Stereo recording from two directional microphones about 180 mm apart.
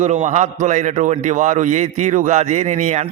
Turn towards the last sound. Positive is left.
turn(degrees=-40)  # may be behind; listen again after turning